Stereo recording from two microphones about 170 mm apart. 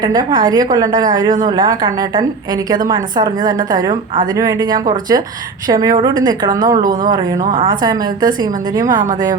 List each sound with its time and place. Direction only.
0.0 s a woman's voice: 25° right (ahead or behind)